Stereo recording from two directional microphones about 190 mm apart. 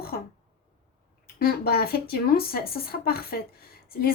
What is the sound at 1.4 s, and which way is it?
Speech, 55° left (ahead or behind).